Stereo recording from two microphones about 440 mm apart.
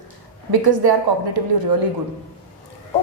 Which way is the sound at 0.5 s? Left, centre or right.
Right.